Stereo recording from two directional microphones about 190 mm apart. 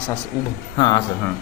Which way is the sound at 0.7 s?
25° left (ahead or behind).